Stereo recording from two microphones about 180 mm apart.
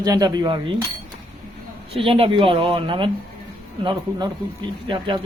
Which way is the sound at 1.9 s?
30° right (ahead or behind).